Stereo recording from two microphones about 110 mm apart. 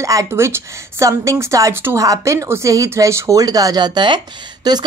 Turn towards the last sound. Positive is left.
turn(degrees=-40)  # may be behind; listen again after turning